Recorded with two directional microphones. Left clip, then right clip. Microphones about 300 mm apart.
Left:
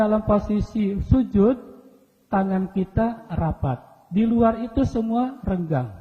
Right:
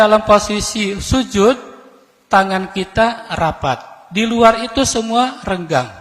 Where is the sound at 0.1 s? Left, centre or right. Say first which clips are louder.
Right 11 dB; centre.